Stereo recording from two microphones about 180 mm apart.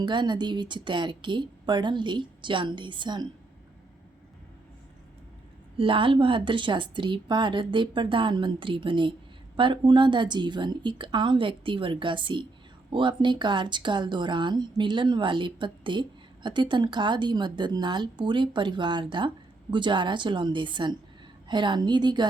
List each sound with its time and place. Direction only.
0.0 s speech: 25° right (ahead or behind)
5.7 s speech: 30° right (ahead or behind)